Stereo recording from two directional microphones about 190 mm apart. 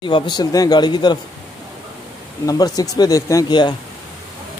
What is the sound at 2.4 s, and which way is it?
Speech, 20° left (ahead or behind).